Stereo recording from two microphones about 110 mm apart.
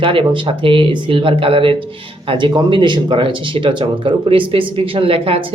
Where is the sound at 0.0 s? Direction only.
50° right (ahead or behind).